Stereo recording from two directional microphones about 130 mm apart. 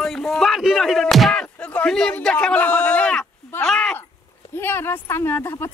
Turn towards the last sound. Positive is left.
turn(degrees=20)  # may be behind; listen again after turning